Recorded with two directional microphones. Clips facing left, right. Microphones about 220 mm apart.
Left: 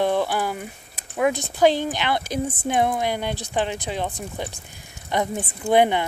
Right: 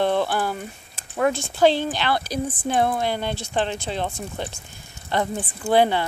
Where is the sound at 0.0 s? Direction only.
10° left (ahead or behind).